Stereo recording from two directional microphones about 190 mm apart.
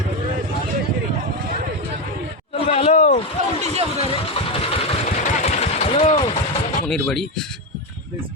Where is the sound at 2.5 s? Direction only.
30° left (ahead or behind).